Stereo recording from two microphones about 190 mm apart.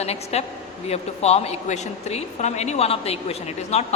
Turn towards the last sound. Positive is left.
turn(degrees=35)  # may be behind; listen again after turning